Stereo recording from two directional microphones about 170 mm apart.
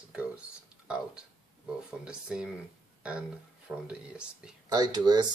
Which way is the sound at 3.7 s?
5° right (ahead or behind).